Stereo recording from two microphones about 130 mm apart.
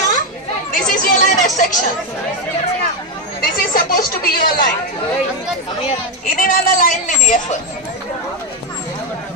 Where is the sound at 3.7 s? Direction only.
90° left.